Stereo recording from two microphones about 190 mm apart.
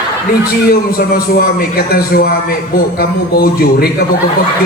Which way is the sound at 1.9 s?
55° left (ahead or behind).